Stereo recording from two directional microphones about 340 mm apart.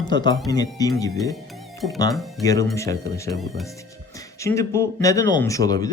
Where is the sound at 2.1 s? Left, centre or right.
Centre.